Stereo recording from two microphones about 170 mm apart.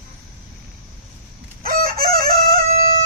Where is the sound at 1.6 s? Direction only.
60° right (ahead or behind).